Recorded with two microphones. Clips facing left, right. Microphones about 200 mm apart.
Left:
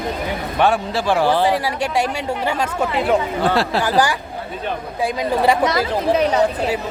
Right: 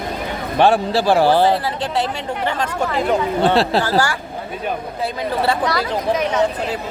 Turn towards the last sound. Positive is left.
turn(degrees=20)  # may be behind; listen again after turning